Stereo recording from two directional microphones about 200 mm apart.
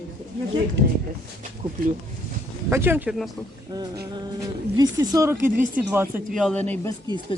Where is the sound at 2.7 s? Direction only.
10° right (ahead or behind).